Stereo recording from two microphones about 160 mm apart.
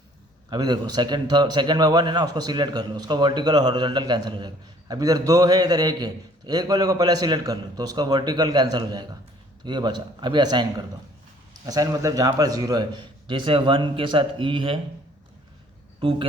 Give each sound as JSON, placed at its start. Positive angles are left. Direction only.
{"t": 0.5, "sound": "a man's voice", "side_deg": -25}
{"t": 16.0, "sound": "speech", "side_deg": -35}